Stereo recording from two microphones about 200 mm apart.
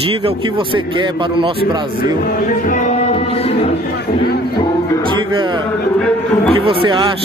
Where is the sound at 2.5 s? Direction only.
40° left (ahead or behind).